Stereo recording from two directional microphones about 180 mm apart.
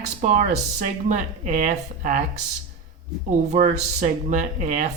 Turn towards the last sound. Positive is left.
turn(degrees=-40)  # may be behind; listen again after turning